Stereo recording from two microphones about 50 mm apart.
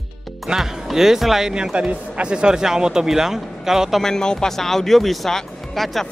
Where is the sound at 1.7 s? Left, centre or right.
Right.